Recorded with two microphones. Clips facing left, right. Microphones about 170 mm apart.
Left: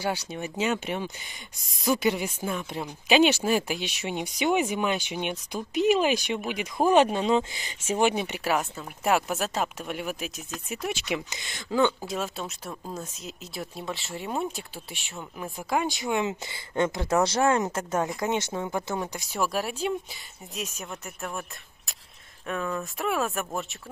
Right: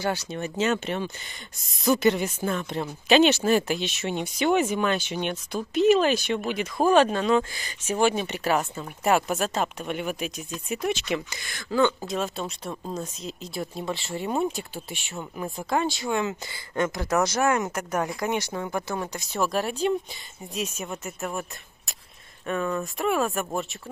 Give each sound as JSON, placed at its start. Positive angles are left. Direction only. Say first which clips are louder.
{"t": 0.0, "sound": "speech", "louder": "right 2 dB", "side_deg": 10}
{"t": 11.2, "sound": "speech", "louder": "right 1 dB", "side_deg": 20}